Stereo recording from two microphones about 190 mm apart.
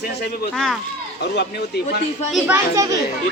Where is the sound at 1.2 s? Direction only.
60° left (ahead or behind).